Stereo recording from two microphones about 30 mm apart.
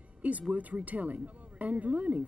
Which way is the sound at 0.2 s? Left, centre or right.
Right.